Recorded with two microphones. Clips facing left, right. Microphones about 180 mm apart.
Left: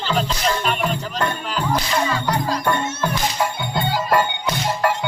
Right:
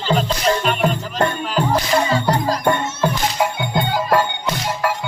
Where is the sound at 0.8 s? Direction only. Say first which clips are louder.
Right 4 dB; 45° right (ahead or behind).